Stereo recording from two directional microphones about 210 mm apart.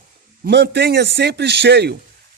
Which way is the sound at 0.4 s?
55° right (ahead or behind).